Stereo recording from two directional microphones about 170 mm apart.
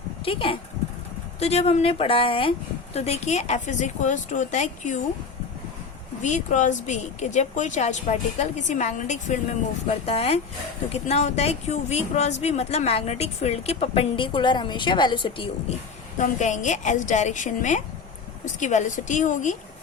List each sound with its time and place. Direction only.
0.3 s a woman's voice: 30° left (ahead or behind)
6.2 s a woman's voice: 45° left (ahead or behind); by 15.4 s 30° left (ahead or behind)
16.1 s a woman's voice: 45° left (ahead or behind)